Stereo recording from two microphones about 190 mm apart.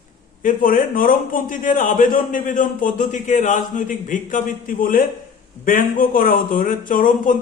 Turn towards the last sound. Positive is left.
turn(degrees=45)  # may be behind; listen again after turning